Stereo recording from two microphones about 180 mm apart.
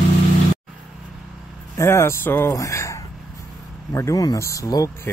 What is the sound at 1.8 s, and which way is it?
Speech, 15° left (ahead or behind).